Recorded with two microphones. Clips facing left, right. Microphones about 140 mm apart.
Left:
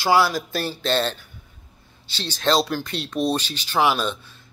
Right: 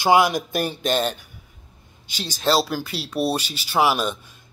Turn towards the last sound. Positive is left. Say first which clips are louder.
# even
turn(degrees=-10)  # may be behind; listen again after turning